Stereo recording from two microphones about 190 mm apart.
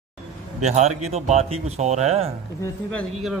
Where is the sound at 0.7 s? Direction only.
35° right (ahead or behind).